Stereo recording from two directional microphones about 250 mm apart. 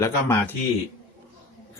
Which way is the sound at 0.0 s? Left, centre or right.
Centre.